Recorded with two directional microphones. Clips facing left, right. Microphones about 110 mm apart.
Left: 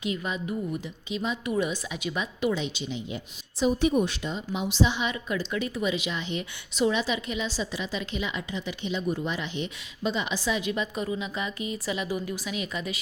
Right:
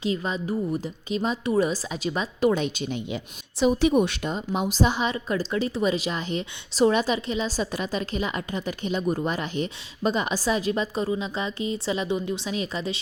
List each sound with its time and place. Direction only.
0.0 s a woman's voice: 30° right (ahead or behind)
2.5 s a woman's voice: 50° right (ahead or behind)
3.6 s a woman's voice: 90° right; by 13.0 s 30° right (ahead or behind)